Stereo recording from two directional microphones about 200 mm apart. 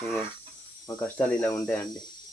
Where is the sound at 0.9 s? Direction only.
10° left (ahead or behind).